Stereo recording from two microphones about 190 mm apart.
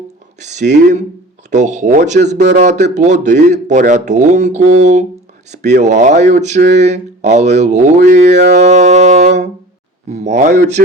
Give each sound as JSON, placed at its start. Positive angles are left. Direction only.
{"t": 0.3, "sound": "speech", "side_deg": -35}
{"t": 8.4, "sound": "speech", "side_deg": -60}
{"t": 8.7, "sound": "speech", "side_deg": -40}
{"t": 10.1, "sound": "speech", "side_deg": -35}
{"t": 10.5, "sound": "speech", "side_deg": -60}